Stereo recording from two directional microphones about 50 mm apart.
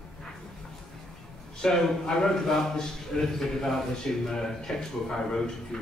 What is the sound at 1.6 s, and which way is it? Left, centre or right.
A man's voice, centre.